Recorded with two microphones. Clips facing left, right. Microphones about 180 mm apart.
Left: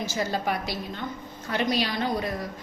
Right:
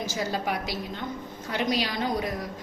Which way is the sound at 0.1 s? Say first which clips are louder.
Left 2 dB; 15° right (ahead or behind).